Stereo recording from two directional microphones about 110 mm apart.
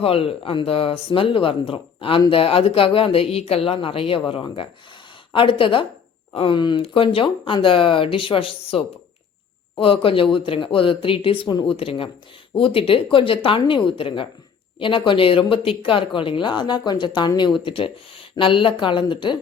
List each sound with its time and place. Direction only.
0.0 s speech: 60° left (ahead or behind); by 17.5 s 45° left (ahead or behind)
17.6 s speech: 55° left (ahead or behind)